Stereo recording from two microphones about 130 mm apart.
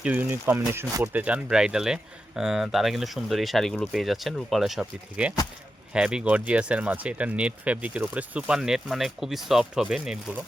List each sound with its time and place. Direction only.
0.0 s speech: 10° right (ahead or behind)
1.1 s speech: 10° right (ahead or behind)